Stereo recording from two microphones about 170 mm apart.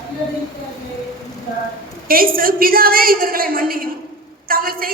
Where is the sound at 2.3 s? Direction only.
55° right (ahead or behind).